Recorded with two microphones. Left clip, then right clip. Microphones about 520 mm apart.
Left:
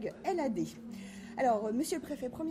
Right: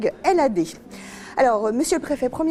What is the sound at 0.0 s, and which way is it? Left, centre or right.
A woman's voice, right.